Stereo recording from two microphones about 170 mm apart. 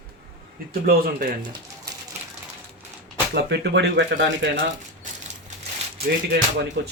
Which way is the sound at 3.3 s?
80° right.